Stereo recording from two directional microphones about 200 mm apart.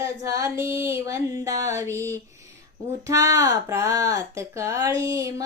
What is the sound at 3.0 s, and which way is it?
Speech, 15° right (ahead or behind).